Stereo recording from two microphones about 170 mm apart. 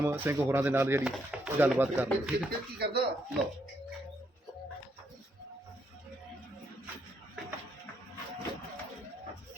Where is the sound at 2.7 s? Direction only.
70° right (ahead or behind).